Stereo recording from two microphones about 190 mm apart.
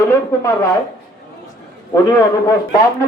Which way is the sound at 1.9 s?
20° left (ahead or behind).